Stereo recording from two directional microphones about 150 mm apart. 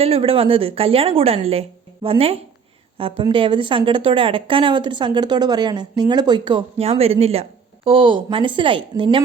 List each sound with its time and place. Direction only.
0.0 s speech: 40° right (ahead or behind)